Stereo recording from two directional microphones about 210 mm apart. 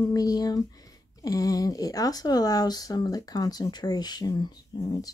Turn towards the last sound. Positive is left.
turn(degrees=20)  # may be behind; listen again after turning